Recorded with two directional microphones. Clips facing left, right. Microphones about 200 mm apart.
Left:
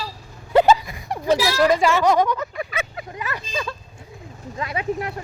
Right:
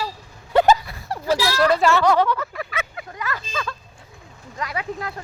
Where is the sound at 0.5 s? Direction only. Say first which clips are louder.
Left 1 dB; 10° left (ahead or behind).